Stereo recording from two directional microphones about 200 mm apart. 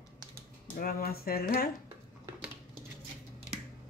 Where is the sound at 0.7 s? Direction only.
45° left (ahead or behind).